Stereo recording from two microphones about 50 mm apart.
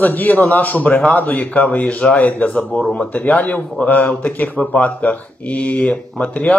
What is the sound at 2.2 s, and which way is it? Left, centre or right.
Speech, left.